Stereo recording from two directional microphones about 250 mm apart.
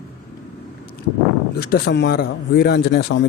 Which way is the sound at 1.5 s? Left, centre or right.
Left.